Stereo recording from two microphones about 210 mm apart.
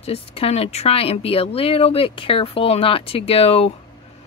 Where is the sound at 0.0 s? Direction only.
30° left (ahead or behind).